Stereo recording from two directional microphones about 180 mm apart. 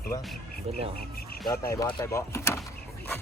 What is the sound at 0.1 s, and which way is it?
Speech, 20° left (ahead or behind).